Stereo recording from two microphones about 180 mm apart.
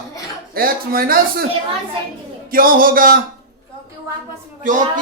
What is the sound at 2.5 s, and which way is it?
Speech, 50° right (ahead or behind).